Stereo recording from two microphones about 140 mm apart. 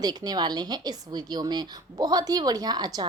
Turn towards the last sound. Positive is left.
turn(degrees=-30)  # may be behind; listen again after turning